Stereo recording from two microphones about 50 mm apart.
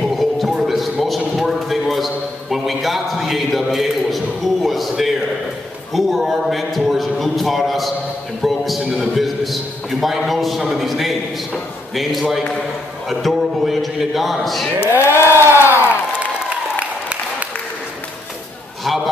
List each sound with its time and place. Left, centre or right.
0.1 s a sound: centre
5.9 s a man's voice: centre
8.4 s a sound: centre
9.1 s a man's voice: centre
15.0 s speech: left
15.3 s crowd: right